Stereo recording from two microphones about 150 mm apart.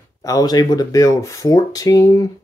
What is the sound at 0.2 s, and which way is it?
Speech, 25° left (ahead or behind).